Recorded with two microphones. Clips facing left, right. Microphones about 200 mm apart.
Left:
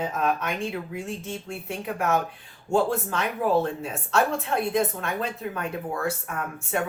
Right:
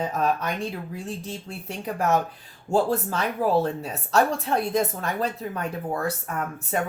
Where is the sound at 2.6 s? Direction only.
35° right (ahead or behind).